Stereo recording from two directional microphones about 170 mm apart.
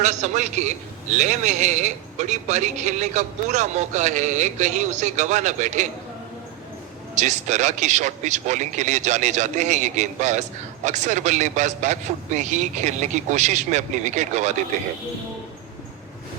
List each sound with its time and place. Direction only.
0.0 s speech: 45° right (ahead or behind)
7.2 s speech: 45° right (ahead or behind)